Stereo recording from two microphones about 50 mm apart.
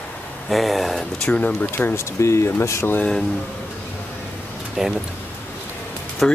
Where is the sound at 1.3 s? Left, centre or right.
Left.